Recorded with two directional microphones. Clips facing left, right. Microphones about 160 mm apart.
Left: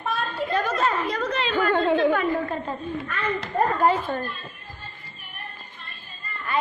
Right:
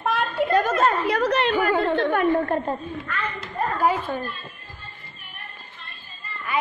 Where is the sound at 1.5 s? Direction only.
10° right (ahead or behind).